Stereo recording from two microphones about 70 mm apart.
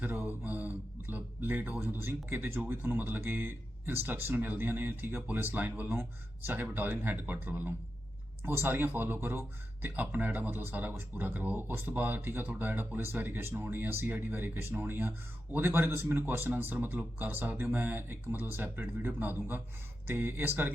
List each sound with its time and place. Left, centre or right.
0.0 s speech: right